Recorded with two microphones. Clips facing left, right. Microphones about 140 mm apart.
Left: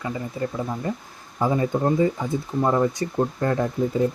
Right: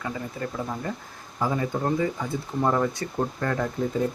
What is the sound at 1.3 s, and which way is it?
Speech, 20° left (ahead or behind).